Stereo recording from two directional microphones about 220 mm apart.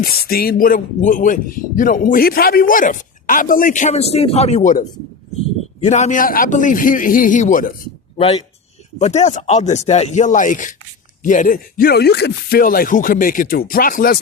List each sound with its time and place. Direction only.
0.0 s speech: 45° left (ahead or behind)
9.0 s speech: 30° left (ahead or behind)